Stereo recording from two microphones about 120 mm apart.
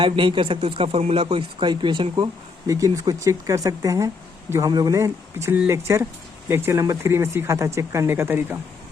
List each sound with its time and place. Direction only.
0.0 s speech: 45° right (ahead or behind)
2.6 s speech: 30° right (ahead or behind)